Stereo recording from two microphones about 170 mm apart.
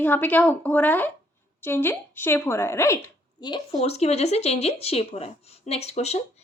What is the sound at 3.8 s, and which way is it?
Speech, 40° left (ahead or behind).